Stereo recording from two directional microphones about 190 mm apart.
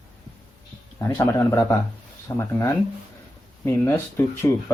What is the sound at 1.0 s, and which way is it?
Speech, 15° left (ahead or behind).